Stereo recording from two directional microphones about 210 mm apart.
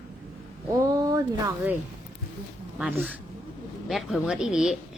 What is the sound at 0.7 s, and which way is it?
Speech, 15° right (ahead or behind).